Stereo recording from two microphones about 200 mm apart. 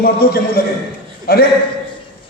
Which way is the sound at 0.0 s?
50° left (ahead or behind).